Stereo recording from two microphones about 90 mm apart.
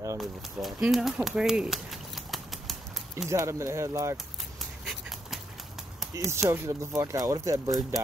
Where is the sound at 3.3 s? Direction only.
35° right (ahead or behind).